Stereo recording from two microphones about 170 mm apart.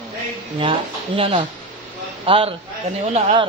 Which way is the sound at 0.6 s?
30° right (ahead or behind).